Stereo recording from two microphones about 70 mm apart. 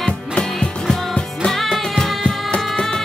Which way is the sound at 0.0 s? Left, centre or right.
Centre.